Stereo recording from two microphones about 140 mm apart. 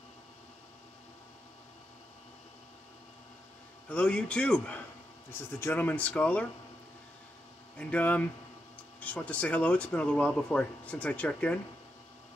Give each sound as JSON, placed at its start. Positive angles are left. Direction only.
{"t": 3.9, "sound": "speech", "side_deg": 5}
{"t": 7.7, "sound": "speech", "side_deg": 10}